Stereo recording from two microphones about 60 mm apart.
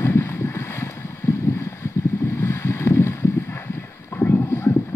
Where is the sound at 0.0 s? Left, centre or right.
Left.